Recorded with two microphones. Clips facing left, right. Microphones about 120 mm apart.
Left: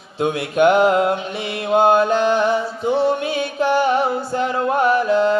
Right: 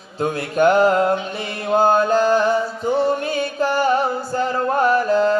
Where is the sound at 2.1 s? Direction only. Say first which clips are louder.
Right 1 dB; 35° right (ahead or behind).